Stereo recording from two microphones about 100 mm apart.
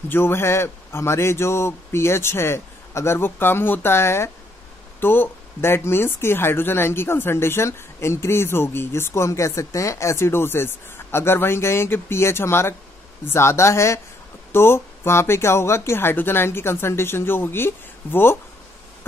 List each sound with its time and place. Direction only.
0.1 s speech: 25° left (ahead or behind)